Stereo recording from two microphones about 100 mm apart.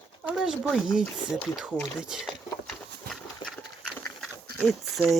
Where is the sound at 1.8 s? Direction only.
Centre (ahead or behind).